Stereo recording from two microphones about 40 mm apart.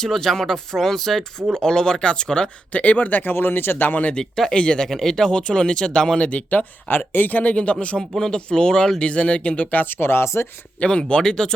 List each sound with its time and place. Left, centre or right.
0.0 s speech: centre
2.7 s speech: left
3.3 s speech: left
4.1 s speech: centre
4.9 s speech: centre
6.1 s speech: left
6.8 s speech: left
7.5 s speech: left
9.8 s speech: left
10.8 s speech: left